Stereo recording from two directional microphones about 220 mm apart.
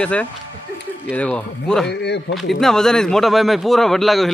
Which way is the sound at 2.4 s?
Centre (ahead or behind).